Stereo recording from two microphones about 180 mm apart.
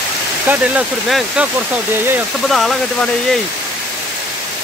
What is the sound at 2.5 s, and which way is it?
Speech, centre (ahead or behind).